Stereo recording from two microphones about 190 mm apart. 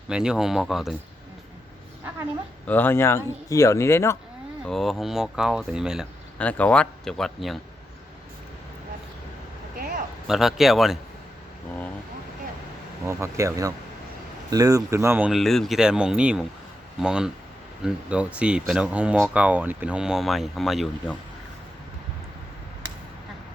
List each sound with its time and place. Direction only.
0.1 s speech: 5° right (ahead or behind)
2.6 s speech: 10° left (ahead or behind)
4.6 s speech: centre (ahead or behind)
6.4 s speech: 5° left (ahead or behind)
9.7 s a sound: 50° right (ahead or behind)
10.2 s speech: centre (ahead or behind)
13.1 s speech: 15° right (ahead or behind)